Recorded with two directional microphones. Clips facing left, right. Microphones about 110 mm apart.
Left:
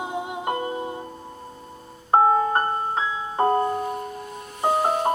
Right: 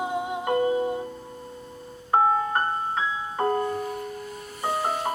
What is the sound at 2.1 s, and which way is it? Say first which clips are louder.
Keyboard: left 4 dB; 30° left (ahead or behind).